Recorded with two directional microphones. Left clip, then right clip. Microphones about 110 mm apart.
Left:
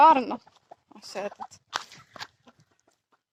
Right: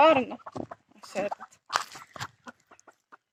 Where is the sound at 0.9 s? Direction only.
30° left (ahead or behind).